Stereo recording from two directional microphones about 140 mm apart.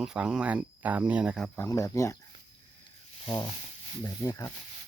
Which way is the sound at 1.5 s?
20° left (ahead or behind).